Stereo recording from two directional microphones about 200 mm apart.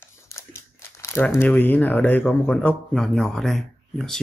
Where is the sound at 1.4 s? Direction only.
10° left (ahead or behind).